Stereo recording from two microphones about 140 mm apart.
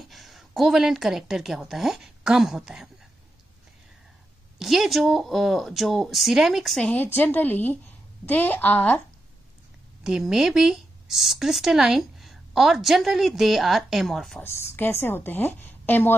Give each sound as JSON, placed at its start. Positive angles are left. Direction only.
{"t": 0.0, "sound": "a woman's voice", "side_deg": 0}
{"t": 4.6, "sound": "a woman's voice", "side_deg": 0}
{"t": 10.0, "sound": "speech", "side_deg": -5}
{"t": 14.4, "sound": "a woman's voice", "side_deg": 20}